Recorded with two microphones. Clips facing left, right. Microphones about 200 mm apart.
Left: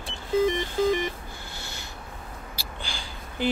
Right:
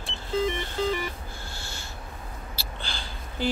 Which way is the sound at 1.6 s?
20° left (ahead or behind).